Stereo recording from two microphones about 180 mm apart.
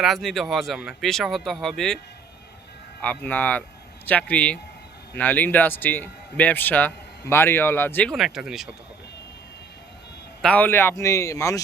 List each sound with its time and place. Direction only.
0.0 s speech: centre (ahead or behind)
3.2 s a man's voice: 10° left (ahead or behind)
8.1 s speech: centre (ahead or behind)
10.4 s a man's voice: 10° left (ahead or behind)